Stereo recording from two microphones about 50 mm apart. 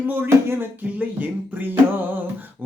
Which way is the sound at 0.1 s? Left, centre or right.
Right.